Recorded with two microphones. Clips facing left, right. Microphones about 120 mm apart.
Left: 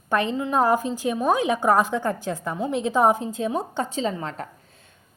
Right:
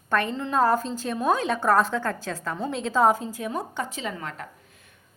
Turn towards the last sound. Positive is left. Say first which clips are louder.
# left 3 dB
turn(degrees=30)  # may be behind; listen again after turning